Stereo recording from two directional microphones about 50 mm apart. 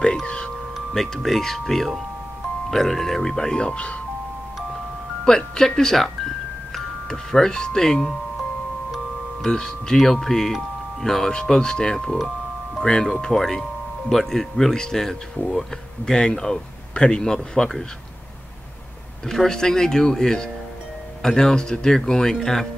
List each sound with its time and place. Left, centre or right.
0.0 s chime: centre
0.7 s speech: centre
5.2 s speech: centre
9.5 s speech: centre
19.2 s speech: centre